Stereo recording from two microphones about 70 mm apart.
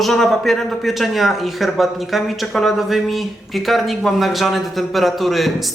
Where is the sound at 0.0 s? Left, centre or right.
Centre.